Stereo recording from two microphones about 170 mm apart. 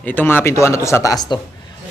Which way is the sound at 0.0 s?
10° left (ahead or behind).